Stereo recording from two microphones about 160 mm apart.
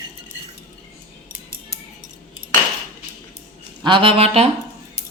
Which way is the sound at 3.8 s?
35° right (ahead or behind).